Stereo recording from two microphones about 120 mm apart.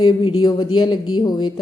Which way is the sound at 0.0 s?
35° left (ahead or behind).